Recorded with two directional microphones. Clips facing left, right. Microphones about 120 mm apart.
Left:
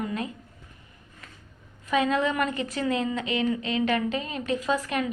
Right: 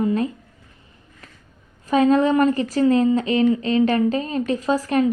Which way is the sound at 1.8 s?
35° right (ahead or behind).